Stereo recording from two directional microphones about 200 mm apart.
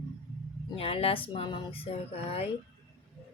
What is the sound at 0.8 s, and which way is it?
Speech, 30° left (ahead or behind).